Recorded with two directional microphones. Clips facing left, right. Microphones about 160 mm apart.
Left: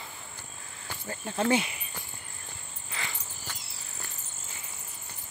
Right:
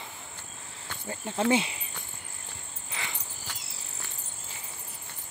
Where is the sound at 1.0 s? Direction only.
20° right (ahead or behind).